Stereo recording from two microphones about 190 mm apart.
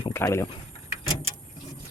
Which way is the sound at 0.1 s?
15° left (ahead or behind).